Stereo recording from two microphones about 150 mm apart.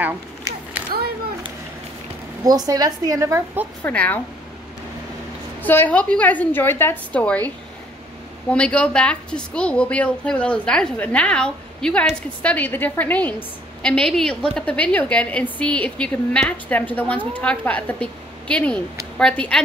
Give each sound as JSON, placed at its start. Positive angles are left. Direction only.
{"t": 2.4, "sound": "a woman's voice", "side_deg": -25}
{"t": 3.8, "sound": "a woman's voice", "side_deg": 10}
{"t": 5.6, "sound": "a woman's voice", "side_deg": 10}